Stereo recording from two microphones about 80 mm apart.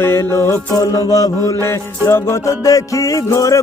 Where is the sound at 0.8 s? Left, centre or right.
Left.